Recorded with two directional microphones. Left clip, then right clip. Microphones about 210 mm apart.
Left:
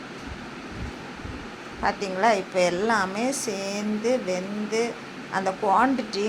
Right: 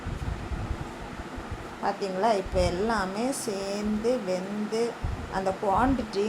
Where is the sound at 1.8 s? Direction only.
15° left (ahead or behind).